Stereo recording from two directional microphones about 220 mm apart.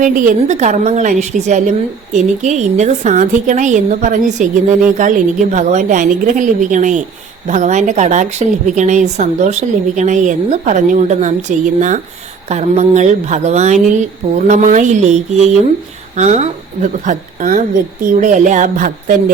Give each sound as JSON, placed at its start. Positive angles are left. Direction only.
{"t": 0.0, "sound": "a woman's voice", "side_deg": -35}